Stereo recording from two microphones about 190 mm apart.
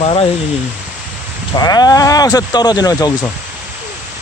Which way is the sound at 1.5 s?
20° left (ahead or behind).